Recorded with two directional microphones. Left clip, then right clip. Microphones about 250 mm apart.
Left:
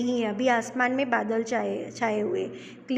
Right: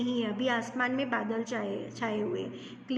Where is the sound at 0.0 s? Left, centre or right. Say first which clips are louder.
Left 6 dB; left.